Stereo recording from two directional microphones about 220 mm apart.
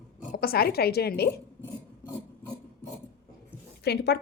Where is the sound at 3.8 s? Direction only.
50° left (ahead or behind).